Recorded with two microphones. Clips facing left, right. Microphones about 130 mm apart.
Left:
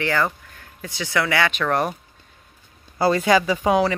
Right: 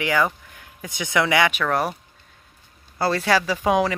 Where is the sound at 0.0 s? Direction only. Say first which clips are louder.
Right 1 dB; 15° right (ahead or behind).